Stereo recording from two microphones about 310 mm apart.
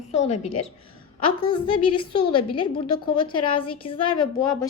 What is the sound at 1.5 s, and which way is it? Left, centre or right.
A woman's voice, centre.